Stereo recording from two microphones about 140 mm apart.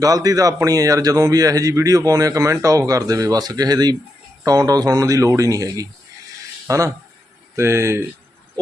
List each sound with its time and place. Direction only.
0.0 s a man's voice: 25° right (ahead or behind)